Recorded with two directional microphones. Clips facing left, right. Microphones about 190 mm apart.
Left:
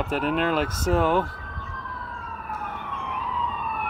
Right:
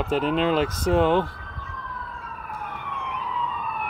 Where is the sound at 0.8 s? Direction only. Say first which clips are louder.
Right 2 dB; 20° right (ahead or behind).